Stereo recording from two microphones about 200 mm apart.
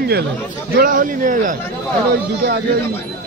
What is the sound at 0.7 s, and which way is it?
Speech, 45° right (ahead or behind).